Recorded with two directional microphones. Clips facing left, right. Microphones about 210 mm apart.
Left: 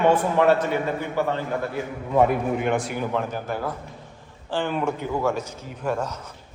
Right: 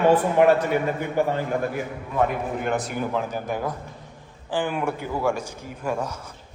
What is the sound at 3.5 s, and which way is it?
Speech, 15° right (ahead or behind).